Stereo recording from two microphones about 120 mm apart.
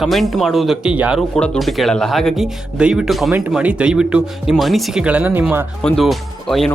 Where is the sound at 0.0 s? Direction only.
Centre (ahead or behind).